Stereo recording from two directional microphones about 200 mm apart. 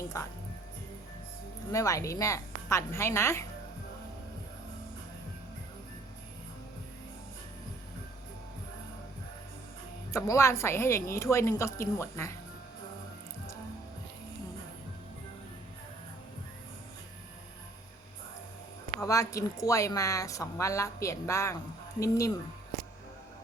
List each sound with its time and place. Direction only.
0.1 s a woman's voice: 15° left (ahead or behind)
1.7 s a woman's voice: 15° left (ahead or behind)
10.1 s a woman's voice: 15° left (ahead or behind)
18.9 s a woman's voice: 15° left (ahead or behind)